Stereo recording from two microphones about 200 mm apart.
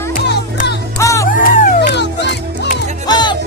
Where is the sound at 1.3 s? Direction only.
40° left (ahead or behind).